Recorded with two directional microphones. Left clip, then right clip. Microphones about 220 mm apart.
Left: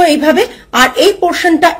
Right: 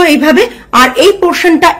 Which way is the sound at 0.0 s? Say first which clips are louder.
Right 2 dB; 20° right (ahead or behind).